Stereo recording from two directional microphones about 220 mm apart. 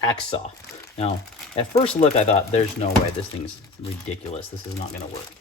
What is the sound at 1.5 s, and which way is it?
Speech, 30° left (ahead or behind).